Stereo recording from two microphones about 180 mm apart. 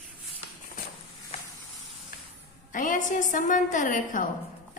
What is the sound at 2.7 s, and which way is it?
A woman's voice, 45° left (ahead or behind).